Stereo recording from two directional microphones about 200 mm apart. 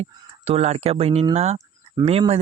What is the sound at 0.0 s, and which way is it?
Speech, 30° right (ahead or behind).